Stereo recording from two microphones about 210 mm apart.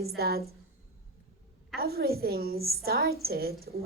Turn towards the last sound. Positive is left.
turn(degrees=-45)  # may be behind; listen again after turning